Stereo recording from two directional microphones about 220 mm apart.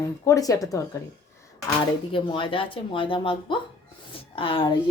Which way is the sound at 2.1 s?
25° left (ahead or behind).